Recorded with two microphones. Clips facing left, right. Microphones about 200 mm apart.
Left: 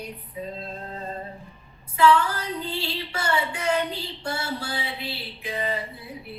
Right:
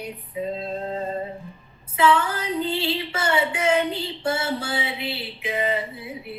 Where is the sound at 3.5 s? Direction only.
90° right.